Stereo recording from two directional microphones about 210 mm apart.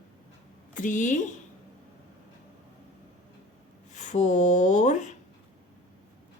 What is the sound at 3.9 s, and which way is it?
Speech, 35° left (ahead or behind).